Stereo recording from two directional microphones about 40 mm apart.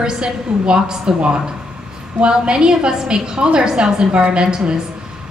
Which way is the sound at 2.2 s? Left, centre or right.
Right.